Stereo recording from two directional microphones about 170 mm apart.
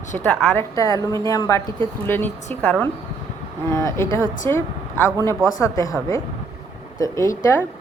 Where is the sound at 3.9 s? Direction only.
15° left (ahead or behind).